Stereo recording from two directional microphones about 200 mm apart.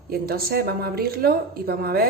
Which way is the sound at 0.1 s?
50° right (ahead or behind).